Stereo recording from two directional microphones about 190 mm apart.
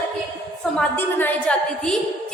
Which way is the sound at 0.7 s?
10° left (ahead or behind).